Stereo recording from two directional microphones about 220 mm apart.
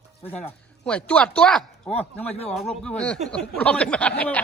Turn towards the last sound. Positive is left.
turn(degrees=5)  # may be behind; listen again after turning